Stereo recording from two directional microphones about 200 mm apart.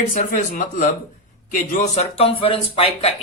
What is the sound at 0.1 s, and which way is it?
Speech, 40° left (ahead or behind).